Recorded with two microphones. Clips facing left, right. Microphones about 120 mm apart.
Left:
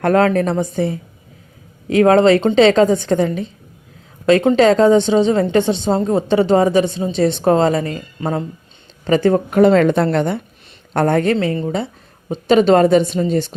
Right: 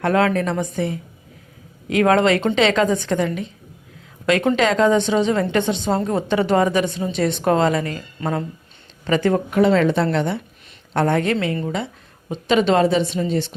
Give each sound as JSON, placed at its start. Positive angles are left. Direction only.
{"t": 0.0, "sound": "a woman's voice", "side_deg": 40}
{"t": 9.5, "sound": "a woman's voice", "side_deg": 45}